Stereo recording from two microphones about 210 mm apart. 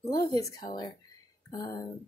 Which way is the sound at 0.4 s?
15° left (ahead or behind).